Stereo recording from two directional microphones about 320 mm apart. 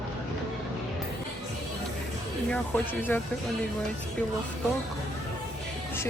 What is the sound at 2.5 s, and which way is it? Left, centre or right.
Speech, centre.